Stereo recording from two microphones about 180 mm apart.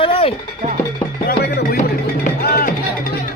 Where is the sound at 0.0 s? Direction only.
30° left (ahead or behind).